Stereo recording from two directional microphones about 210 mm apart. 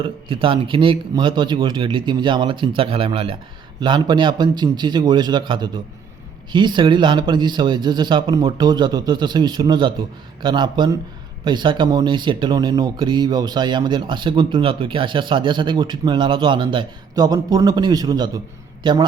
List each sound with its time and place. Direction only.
0.0 s a man's voice: 25° right (ahead or behind)